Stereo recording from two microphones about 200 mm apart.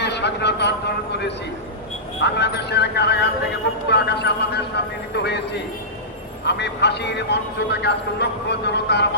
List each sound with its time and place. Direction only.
0.0 s vehicle: 60° left (ahead or behind)
2.2 s a man's voice: 55° left (ahead or behind)
6.4 s a man's voice: 60° left (ahead or behind)